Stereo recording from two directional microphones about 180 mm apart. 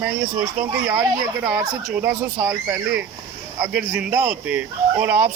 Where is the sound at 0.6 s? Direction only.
10° right (ahead or behind).